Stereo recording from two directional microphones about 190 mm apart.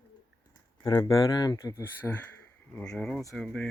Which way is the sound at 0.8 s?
20° left (ahead or behind).